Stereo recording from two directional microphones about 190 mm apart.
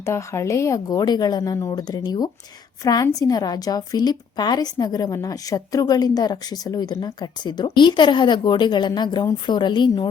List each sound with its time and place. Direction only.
0.0 s a woman's voice: 15° left (ahead or behind)